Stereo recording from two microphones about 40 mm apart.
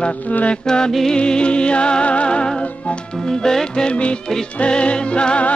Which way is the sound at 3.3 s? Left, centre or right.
Centre.